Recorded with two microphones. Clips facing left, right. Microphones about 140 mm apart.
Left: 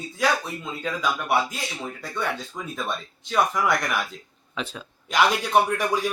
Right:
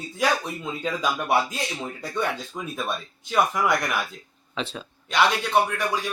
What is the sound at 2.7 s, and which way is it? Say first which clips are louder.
Speech: even; 10° right (ahead or behind).